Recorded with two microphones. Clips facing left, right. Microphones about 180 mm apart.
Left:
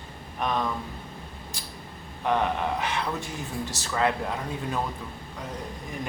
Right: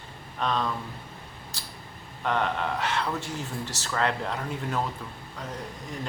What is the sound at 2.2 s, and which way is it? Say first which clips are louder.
Speech: left 2 dB; 15° left (ahead or behind).